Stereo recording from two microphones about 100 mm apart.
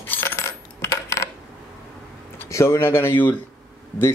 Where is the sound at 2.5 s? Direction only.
30° left (ahead or behind).